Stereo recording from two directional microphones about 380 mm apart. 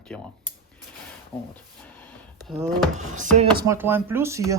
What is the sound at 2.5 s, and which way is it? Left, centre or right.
Speech, centre.